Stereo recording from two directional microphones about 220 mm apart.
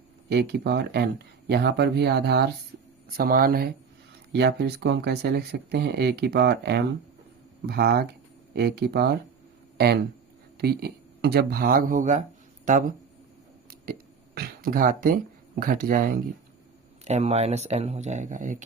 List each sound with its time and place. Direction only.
0.3 s speech: 50° right (ahead or behind)
14.3 s speech: 45° right (ahead or behind)
17.1 s speech: 30° right (ahead or behind)